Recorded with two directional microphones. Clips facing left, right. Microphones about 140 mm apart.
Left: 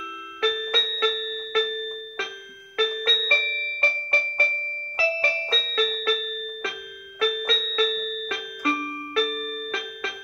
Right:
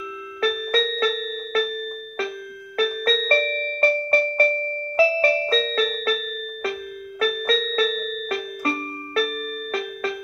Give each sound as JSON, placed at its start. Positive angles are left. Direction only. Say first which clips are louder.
{"t": 0.4, "sound": "music", "louder": "right 4 dB", "side_deg": -40}
{"t": 7.2, "sound": "music", "louder": "right 3 dB", "side_deg": -45}